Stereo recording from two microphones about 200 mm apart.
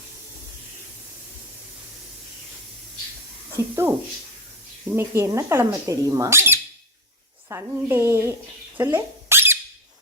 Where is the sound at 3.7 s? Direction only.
10° right (ahead or behind).